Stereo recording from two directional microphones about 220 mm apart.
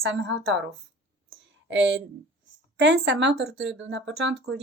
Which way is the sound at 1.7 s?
55° right (ahead or behind).